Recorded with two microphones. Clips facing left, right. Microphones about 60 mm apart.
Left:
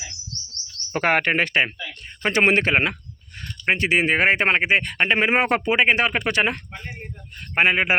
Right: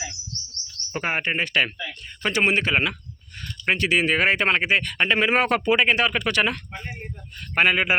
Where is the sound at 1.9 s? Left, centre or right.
Left.